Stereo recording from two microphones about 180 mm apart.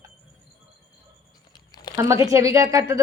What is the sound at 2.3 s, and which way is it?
Speech, 15° right (ahead or behind).